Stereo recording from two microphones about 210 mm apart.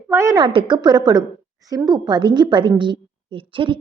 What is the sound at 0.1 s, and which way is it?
A woman's voice, 15° right (ahead or behind).